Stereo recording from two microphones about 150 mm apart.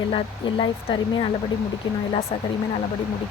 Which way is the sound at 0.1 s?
35° left (ahead or behind).